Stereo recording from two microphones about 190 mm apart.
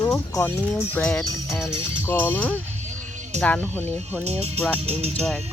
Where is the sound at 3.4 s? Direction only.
10° left (ahead or behind).